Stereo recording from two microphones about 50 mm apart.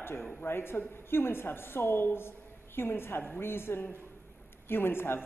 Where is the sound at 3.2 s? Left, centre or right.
Left.